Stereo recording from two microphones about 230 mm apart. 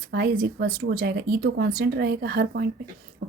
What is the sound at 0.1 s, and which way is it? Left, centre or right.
A woman's voice, right.